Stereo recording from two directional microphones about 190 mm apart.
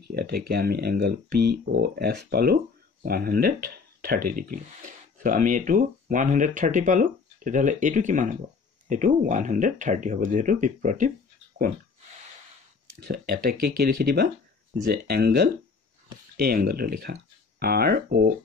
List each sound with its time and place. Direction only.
0.1 s speech: 55° right (ahead or behind)
13.0 s speech: 50° right (ahead or behind)